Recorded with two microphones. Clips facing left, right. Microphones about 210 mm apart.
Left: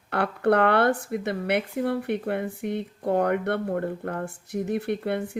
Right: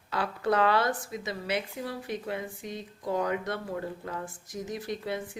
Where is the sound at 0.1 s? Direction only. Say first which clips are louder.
Left 6 dB; 60° left (ahead or behind).